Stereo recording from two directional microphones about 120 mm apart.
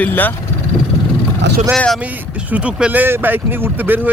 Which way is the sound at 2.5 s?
10° right (ahead or behind).